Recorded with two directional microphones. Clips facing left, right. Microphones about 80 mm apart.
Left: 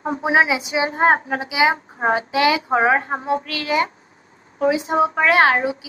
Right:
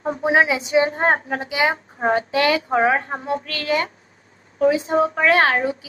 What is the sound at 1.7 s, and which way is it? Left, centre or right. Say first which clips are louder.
A woman's voice: left 1 dB; left.